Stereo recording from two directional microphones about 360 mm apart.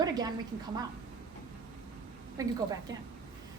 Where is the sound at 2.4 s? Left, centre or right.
Centre.